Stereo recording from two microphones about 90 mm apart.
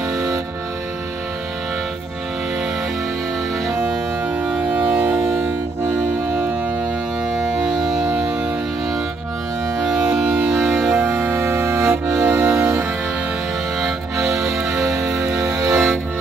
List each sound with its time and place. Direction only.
4.5 s music: 15° right (ahead or behind)
7.3 s music: 5° right (ahead or behind)
9.8 s music: 10° right (ahead or behind)
11.1 s accordion: 20° right (ahead or behind)
12.1 s music: 30° right (ahead or behind)
13.7 s music: 5° right (ahead or behind)
15.4 s music: 30° right (ahead or behind)
15.7 s music: centre (ahead or behind)